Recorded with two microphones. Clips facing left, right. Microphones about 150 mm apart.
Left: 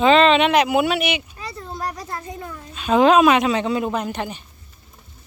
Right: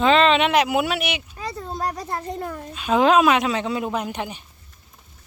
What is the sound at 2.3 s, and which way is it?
Speech, 50° right (ahead or behind).